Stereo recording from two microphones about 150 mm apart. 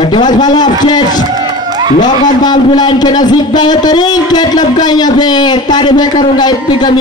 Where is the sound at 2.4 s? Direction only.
30° left (ahead or behind).